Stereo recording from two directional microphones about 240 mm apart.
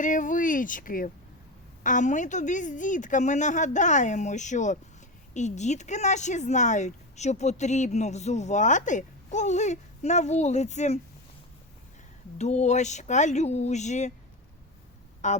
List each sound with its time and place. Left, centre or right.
0.0 s a woman's voice: left
12.4 s speech: left
15.2 s a woman's voice: left